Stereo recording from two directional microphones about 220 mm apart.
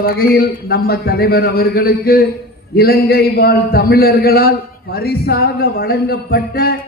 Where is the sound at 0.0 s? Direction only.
45° left (ahead or behind).